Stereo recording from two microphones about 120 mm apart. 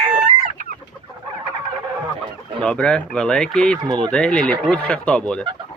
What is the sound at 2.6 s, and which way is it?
Speech, 5° left (ahead or behind).